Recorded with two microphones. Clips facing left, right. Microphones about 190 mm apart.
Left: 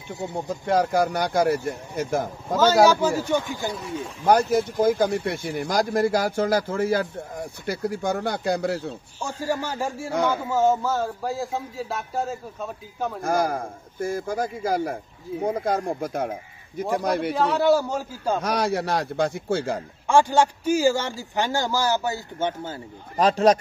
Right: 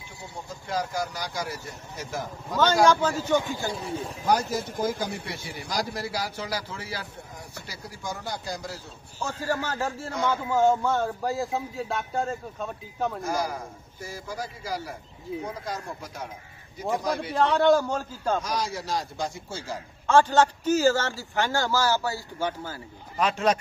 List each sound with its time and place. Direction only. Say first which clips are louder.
0.3 s speech: left 9 dB; 60° left (ahead or behind)
2.5 s a man's voice: left 4 dB; 5° left (ahead or behind)
3.3 s speech: even; 15° right (ahead or behind)
3.7 s speech: left 1 dB; 35° right (ahead or behind)
4.2 s speech: left 7 dB; 55° left (ahead or behind)
9.2 s a man's voice: left 2 dB; 15° left (ahead or behind)
13.2 s a man's voice: left 6 dB; 55° left (ahead or behind)
17.3 s a man's voice: right 1 dB; 5° left (ahead or behind)
18.4 s speech: left 7 dB; 65° left (ahead or behind)
20.1 s a man's voice: left 1 dB; 10° left (ahead or behind)
23.1 s a man's voice: left 6 dB; 35° left (ahead or behind)